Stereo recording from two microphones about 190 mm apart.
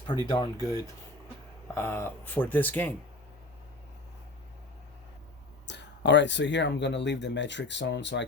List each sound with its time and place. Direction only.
0.3 s speech: 20° left (ahead or behind)
5.6 s speech: 65° left (ahead or behind)